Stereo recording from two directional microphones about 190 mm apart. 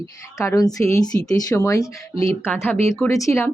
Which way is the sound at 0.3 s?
15° left (ahead or behind).